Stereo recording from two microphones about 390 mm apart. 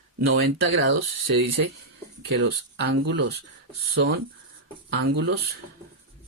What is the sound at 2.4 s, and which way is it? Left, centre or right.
Speech, right.